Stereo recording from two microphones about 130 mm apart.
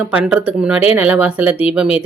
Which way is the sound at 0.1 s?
10° right (ahead or behind).